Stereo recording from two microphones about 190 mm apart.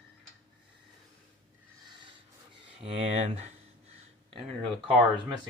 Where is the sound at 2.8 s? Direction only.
30° right (ahead or behind).